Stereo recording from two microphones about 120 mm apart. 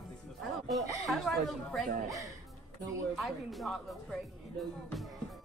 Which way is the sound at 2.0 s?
25° right (ahead or behind).